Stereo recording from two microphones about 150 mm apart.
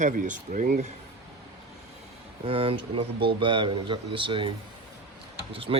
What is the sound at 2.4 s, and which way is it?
Speech, 40° right (ahead or behind).